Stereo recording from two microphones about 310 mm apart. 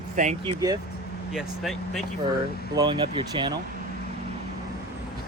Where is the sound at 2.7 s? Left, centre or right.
Centre.